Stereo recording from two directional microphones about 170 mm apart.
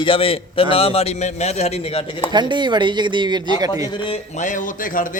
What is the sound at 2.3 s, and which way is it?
Speech, 25° right (ahead or behind).